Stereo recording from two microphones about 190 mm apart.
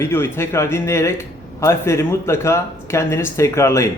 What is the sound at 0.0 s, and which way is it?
Speech, 10° left (ahead or behind).